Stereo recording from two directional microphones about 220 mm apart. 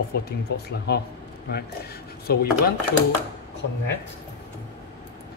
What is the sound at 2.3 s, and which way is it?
Speech, 45° left (ahead or behind).